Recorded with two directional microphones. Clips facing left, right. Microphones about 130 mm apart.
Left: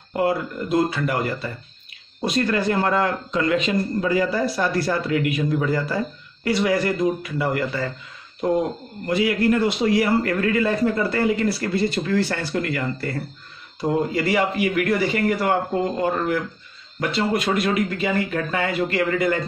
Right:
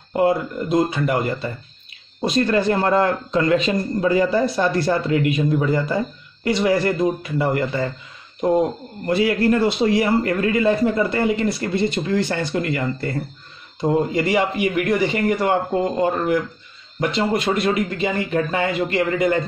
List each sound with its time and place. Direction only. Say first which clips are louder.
0.1 s a man's voice: right 3 dB; 25° right (ahead or behind)
9.0 s a man's voice: right 2 dB; 30° right (ahead or behind)
17.0 s a man's voice: right 2 dB; 25° right (ahead or behind)